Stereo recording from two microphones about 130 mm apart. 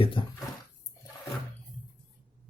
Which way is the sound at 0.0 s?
40° left (ahead or behind).